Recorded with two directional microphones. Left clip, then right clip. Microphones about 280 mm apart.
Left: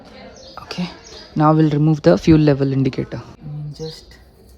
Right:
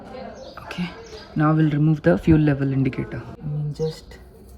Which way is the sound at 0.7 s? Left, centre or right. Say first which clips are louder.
Left 3 dB; centre.